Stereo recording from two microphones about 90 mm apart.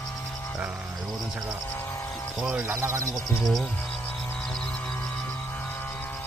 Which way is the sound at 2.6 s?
25° right (ahead or behind).